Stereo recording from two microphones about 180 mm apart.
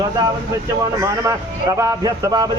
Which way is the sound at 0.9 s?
15° right (ahead or behind).